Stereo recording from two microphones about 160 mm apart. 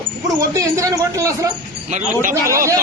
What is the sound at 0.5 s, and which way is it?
A woman's voice, 20° right (ahead or behind).